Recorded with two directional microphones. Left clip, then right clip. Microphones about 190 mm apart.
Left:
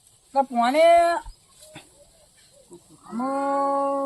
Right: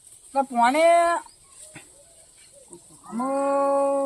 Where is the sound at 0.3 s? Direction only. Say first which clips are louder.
Even; 20° left (ahead or behind).